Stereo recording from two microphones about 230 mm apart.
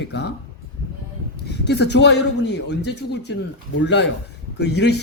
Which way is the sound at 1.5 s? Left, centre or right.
Left.